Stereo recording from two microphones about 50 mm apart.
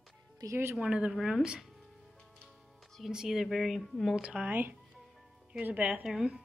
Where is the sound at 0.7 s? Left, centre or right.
Right.